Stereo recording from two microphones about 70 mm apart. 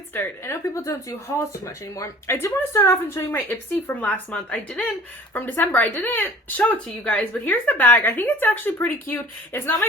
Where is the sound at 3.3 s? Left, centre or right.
Left.